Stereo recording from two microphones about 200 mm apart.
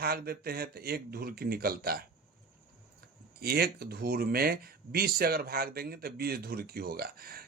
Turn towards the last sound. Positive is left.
turn(degrees=-50)  # may be behind; listen again after turning